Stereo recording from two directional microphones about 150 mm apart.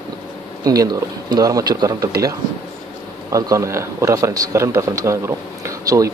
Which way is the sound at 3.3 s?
20° right (ahead or behind).